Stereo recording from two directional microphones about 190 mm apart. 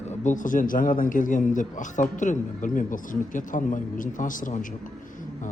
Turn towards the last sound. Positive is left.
turn(degrees=45)  # may be behind; listen again after turning